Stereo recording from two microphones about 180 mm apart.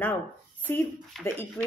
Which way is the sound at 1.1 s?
Centre (ahead or behind).